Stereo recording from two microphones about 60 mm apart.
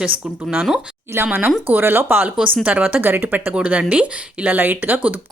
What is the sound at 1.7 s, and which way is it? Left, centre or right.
A woman's voice, right.